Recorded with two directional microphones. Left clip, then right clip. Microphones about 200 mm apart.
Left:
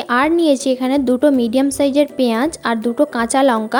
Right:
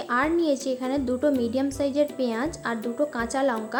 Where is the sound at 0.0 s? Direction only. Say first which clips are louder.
Left 9 dB; 45° left (ahead or behind).